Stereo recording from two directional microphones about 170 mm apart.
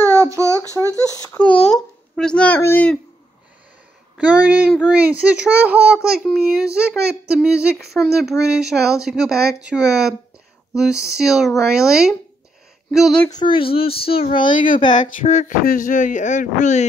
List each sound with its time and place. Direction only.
0.0 s a sound: 15° right (ahead or behind)
1.1 s baby cry: 20° left (ahead or behind)
1.4 s a sound: 5° left (ahead or behind)
4.9 s a child's voice: 10° right (ahead or behind)
13.3 s a child's voice: 30° left (ahead or behind)
15.0 s speech: 50° left (ahead or behind)